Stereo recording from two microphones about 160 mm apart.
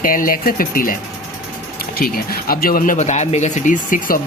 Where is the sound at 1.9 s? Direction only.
65° left (ahead or behind).